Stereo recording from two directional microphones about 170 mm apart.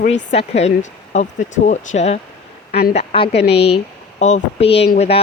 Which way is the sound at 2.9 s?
35° left (ahead or behind).